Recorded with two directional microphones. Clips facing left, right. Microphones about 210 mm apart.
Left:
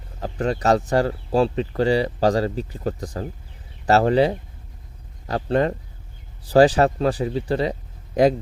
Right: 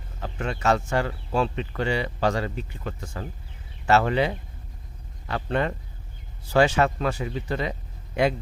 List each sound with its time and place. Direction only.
0.2 s speech: 35° left (ahead or behind)